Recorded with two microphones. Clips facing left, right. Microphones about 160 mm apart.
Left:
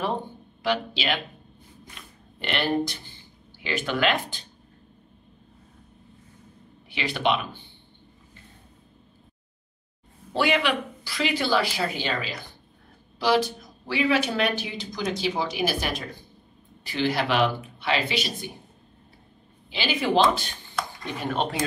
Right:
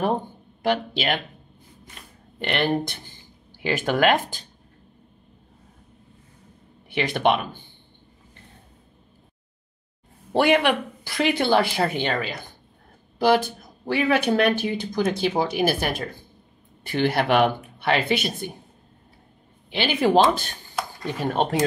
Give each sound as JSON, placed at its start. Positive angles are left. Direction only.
{"t": 0.6, "sound": "speech", "side_deg": -50}
{"t": 6.9, "sound": "speech", "side_deg": -50}
{"t": 10.3, "sound": "speech", "side_deg": -55}
{"t": 19.7, "sound": "speech", "side_deg": -55}